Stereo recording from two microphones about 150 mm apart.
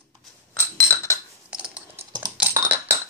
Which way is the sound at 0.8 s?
20° left (ahead or behind).